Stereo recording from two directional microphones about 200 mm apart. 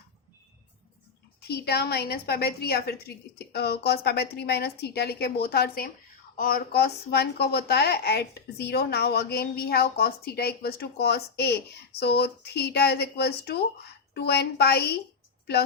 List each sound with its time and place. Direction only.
1.4 s a woman's voice: 50° left (ahead or behind)